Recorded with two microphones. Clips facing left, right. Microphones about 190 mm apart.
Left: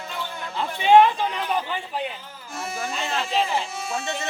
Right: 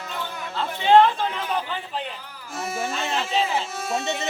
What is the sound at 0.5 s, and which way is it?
Chatter, 15° left (ahead or behind).